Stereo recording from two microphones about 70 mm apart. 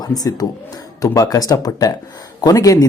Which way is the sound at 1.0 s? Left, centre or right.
Left.